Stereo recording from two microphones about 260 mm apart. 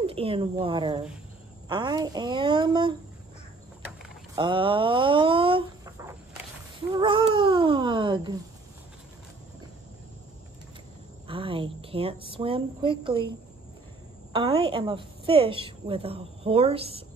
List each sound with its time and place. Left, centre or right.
0.0 s a woman's voice: right
4.4 s a woman's voice: centre
6.9 s cat: centre
11.2 s a woman's voice: centre
14.3 s a woman's voice: centre